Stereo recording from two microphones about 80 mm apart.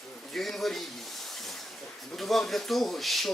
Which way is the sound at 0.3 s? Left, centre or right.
Centre.